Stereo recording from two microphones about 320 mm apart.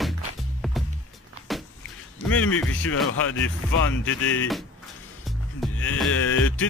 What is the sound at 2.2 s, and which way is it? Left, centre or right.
Speech, left.